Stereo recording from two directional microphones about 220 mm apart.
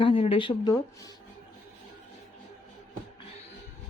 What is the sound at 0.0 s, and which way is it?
Speech, 25° left (ahead or behind).